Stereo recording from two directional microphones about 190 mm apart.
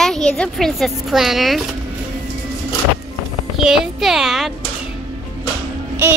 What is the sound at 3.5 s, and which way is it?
Speech, centre (ahead or behind).